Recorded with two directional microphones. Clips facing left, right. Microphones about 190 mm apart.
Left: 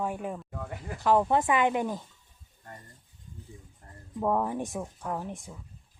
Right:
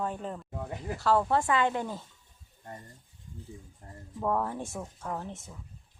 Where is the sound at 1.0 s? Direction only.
15° left (ahead or behind).